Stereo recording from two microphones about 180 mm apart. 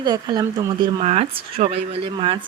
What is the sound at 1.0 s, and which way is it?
Speech, 35° right (ahead or behind).